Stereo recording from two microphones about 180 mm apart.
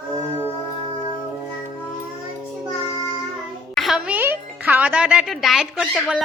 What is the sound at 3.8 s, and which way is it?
A child's voice, 5° right (ahead or behind).